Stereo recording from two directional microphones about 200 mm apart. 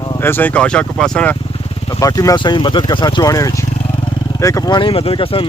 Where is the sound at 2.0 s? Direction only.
15° left (ahead or behind).